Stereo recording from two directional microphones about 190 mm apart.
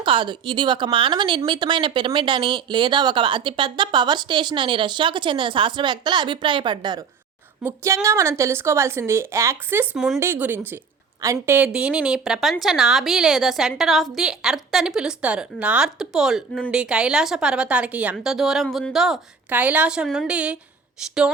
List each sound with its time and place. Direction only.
0.0 s a woman's voice: 25° right (ahead or behind); by 20.6 s 5° right (ahead or behind)